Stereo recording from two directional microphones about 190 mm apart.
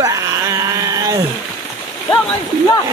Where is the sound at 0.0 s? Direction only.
15° right (ahead or behind).